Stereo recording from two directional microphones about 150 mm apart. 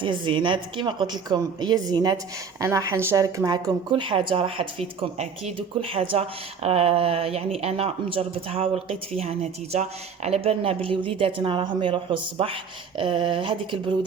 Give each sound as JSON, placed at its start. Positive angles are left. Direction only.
{"t": 0.0, "sound": "a woman's voice", "side_deg": -35}